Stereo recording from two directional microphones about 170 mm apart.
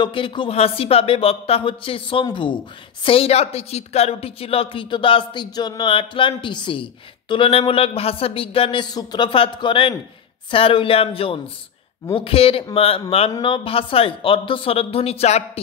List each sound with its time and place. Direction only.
0.0 s speech: 30° left (ahead or behind)